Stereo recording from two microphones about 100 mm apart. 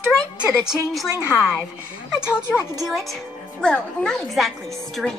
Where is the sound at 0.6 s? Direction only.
Centre (ahead or behind).